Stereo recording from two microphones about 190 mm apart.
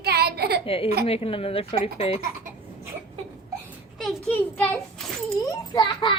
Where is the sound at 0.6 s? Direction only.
30° left (ahead or behind).